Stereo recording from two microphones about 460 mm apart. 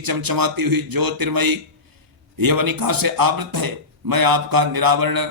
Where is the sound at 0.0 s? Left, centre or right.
Right.